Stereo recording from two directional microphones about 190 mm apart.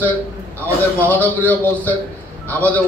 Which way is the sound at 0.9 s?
10° left (ahead or behind).